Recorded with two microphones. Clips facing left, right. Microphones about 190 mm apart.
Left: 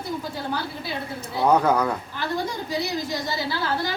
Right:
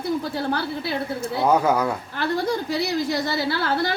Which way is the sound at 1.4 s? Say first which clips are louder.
Even; 5° right (ahead or behind).